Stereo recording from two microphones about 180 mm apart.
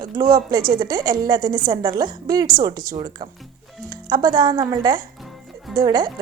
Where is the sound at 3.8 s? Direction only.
20° right (ahead or behind).